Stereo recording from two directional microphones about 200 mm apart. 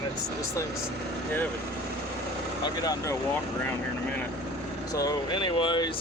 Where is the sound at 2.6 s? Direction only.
20° left (ahead or behind).